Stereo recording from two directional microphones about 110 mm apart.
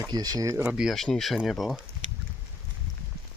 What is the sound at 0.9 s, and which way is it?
Speech, 5° left (ahead or behind).